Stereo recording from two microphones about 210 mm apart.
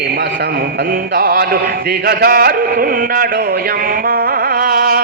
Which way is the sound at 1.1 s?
45° right (ahead or behind).